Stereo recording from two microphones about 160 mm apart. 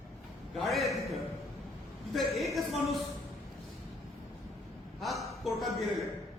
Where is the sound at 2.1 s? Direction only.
Centre (ahead or behind).